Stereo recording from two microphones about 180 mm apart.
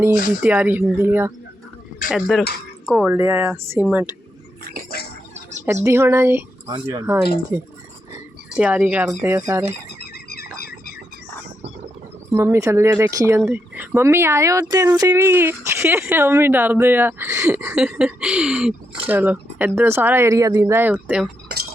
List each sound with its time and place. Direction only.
0.4 s speech: 10° right (ahead or behind)
2.0 s speech: centre (ahead or behind)
5.6 s speech: 15° right (ahead or behind)
10.0 s a sound: 60° left (ahead or behind)
12.3 s speech: 15° right (ahead or behind)
21.5 s chink: 65° right (ahead or behind)